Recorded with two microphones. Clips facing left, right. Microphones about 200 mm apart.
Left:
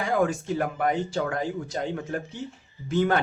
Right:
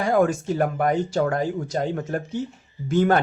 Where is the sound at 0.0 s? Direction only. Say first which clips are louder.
Right 5 dB; 40° right (ahead or behind).